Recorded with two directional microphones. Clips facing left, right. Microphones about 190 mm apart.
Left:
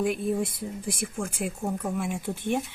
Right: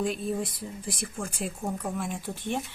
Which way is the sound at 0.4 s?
55° left (ahead or behind).